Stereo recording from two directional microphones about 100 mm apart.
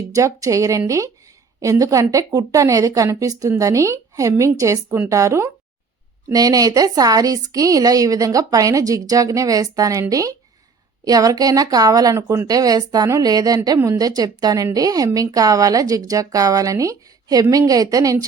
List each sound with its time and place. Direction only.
0.1 s a woman's voice: 35° right (ahead or behind)
12.1 s speech: 25° right (ahead or behind)
12.5 s a woman's voice: 40° right (ahead or behind)